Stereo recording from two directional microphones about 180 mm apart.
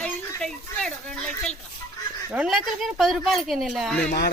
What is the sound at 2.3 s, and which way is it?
Speech, 5° right (ahead or behind).